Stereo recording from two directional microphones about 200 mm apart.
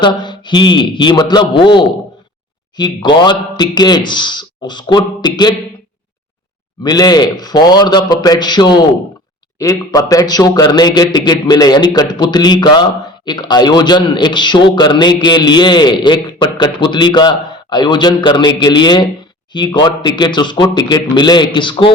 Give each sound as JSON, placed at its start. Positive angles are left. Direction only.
{"t": 0.0, "sound": "a man's voice", "side_deg": 25}
{"t": 6.8, "sound": "a man's voice", "side_deg": 20}